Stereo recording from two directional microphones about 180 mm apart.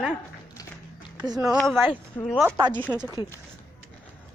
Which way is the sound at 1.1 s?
20° right (ahead or behind).